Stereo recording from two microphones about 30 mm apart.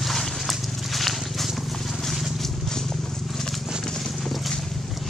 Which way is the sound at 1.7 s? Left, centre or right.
Centre.